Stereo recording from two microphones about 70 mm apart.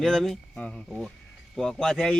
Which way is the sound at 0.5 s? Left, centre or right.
Centre.